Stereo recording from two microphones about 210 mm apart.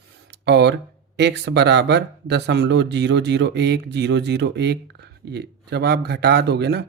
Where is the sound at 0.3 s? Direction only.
55° right (ahead or behind).